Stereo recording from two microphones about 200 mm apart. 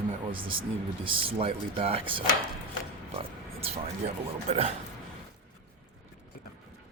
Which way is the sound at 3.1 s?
30° right (ahead or behind).